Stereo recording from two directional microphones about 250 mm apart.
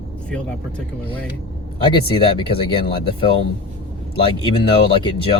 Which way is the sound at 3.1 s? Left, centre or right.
Left.